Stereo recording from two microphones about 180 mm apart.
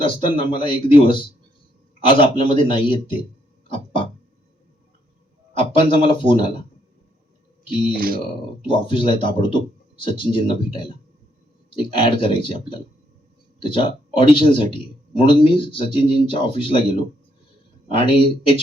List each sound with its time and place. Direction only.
0.0 s speech: 30° left (ahead or behind)
2.2 s speech: 30° left (ahead or behind)
3.7 s a sound: 30° left (ahead or behind)
5.9 s speech: 25° left (ahead or behind)
7.9 s speech: 55° right (ahead or behind)
8.6 s speech: 30° left (ahead or behind)